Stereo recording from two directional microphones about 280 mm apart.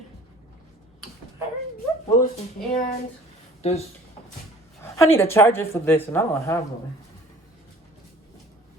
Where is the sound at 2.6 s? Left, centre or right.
Left.